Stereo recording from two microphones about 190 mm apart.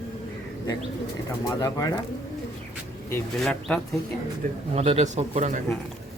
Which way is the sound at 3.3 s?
Centre (ahead or behind).